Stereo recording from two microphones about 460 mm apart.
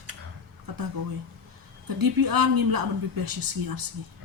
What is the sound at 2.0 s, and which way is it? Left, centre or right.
A woman's voice, right.